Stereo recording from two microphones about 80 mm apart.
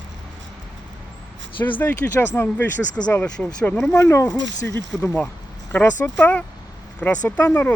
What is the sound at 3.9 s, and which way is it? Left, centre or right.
Speech, left.